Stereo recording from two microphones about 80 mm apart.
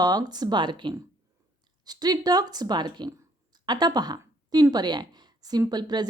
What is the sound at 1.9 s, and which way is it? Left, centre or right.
A woman's voice, right.